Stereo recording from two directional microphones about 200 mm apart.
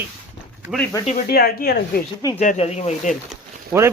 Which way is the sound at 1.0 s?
45° left (ahead or behind).